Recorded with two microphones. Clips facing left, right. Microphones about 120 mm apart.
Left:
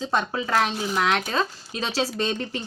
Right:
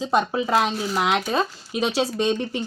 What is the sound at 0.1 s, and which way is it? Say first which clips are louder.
Speech: right 4 dB; 10° right (ahead or behind).